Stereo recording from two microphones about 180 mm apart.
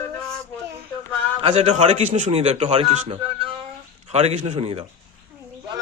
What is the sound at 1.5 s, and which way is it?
Speech, 35° right (ahead or behind).